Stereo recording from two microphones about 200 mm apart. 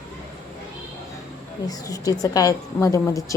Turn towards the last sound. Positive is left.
turn(degrees=15)  # may be behind; listen again after turning